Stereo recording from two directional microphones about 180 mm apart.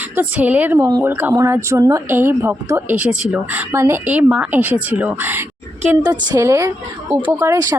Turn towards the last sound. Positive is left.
turn(degrees=-15)  # may be behind; listen again after turning